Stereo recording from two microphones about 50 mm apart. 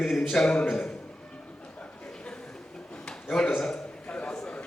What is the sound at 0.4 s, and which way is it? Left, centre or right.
Speech, centre.